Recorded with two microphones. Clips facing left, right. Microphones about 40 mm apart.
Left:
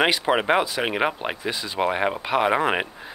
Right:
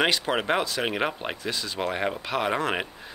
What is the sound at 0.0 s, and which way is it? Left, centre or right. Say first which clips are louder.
Speech: left 4 dB; centre.